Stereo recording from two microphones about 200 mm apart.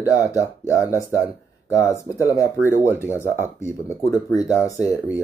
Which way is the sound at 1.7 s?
15° left (ahead or behind).